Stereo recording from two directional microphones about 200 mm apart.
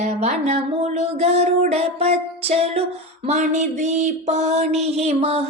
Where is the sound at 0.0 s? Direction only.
35° right (ahead or behind).